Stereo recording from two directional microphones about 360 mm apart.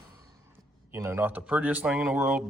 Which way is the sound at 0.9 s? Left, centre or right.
Centre.